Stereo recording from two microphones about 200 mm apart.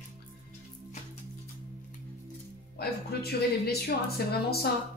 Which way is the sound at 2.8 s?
50° left (ahead or behind).